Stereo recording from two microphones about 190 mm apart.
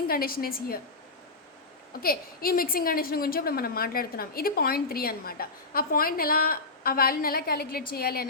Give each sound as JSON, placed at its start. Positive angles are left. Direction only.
{"t": 0.1, "sound": "a woman's voice", "side_deg": 50}
{"t": 2.0, "sound": "a woman's voice", "side_deg": 50}